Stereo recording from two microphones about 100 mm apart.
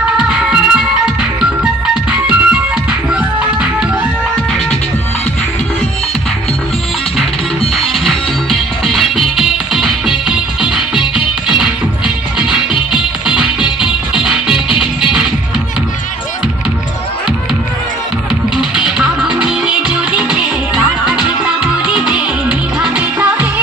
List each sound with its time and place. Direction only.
0.2 s music: 10° right (ahead or behind)
2.0 s music: 10° right (ahead or behind)
7.8 s music: centre (ahead or behind)
18.5 s music: 5° right (ahead or behind)